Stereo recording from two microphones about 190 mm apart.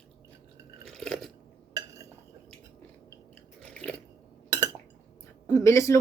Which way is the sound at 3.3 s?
5° left (ahead or behind).